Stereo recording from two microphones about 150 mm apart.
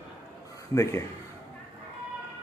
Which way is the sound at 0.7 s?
20° left (ahead or behind).